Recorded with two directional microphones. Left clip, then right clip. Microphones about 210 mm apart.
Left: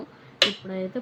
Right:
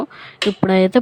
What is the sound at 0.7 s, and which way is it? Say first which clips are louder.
Speech: right 17 dB; 55° right (ahead or behind).